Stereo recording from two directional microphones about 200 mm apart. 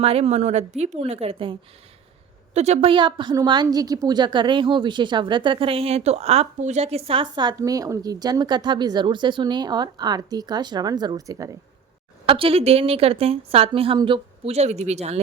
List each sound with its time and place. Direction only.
0.0 s a woman's voice: 30° right (ahead or behind)
2.6 s a woman's voice: 35° right (ahead or behind)